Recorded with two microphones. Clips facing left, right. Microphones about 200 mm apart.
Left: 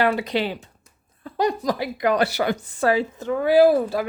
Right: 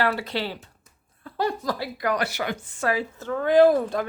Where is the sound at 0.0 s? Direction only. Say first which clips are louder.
Left 4 dB; 15° left (ahead or behind).